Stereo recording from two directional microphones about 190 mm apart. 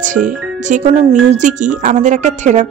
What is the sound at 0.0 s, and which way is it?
Speech, 40° right (ahead or behind).